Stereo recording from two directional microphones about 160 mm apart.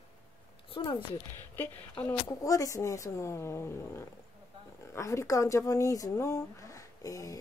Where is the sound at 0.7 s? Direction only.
30° left (ahead or behind).